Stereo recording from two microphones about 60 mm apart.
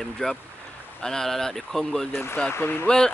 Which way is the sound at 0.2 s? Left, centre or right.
Centre.